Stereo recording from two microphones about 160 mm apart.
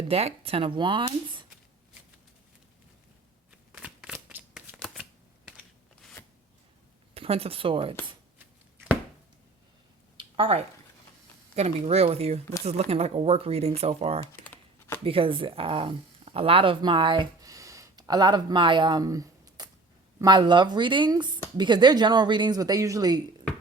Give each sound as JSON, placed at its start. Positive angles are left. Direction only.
{"t": 0.1, "sound": "speech", "side_deg": -40}
{"t": 3.7, "sound": "shuffling cards", "side_deg": -5}
{"t": 5.5, "sound": "a sound", "side_deg": 0}
{"t": 7.1, "sound": "speech", "side_deg": -40}
{"t": 10.2, "sound": "a sound", "side_deg": -35}
{"t": 11.5, "sound": "speech", "side_deg": -40}
{"t": 14.4, "sound": "typing", "side_deg": 10}
{"t": 15.0, "sound": "speech", "side_deg": -35}